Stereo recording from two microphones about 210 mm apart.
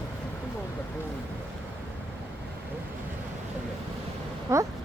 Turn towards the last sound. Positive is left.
turn(degrees=-15)  # may be behind; listen again after turning